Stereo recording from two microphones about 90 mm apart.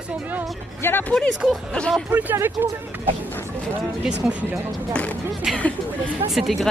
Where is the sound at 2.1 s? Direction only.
20° right (ahead or behind).